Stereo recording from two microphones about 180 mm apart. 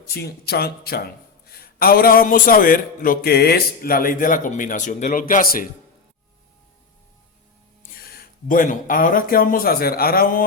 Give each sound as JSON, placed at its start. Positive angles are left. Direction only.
{"t": 0.1, "sound": "a man's voice", "side_deg": 60}
{"t": 7.8, "sound": "speech", "side_deg": 55}